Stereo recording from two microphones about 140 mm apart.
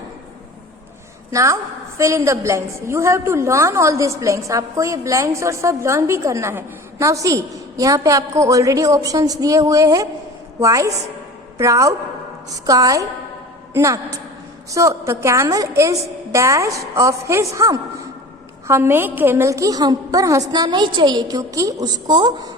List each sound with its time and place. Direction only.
1.3 s a woman's voice: 20° right (ahead or behind)